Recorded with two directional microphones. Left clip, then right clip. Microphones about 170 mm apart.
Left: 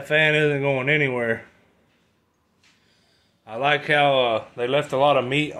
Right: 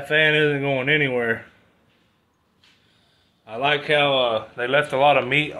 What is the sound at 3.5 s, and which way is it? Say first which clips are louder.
Speech: even; 35° left (ahead or behind).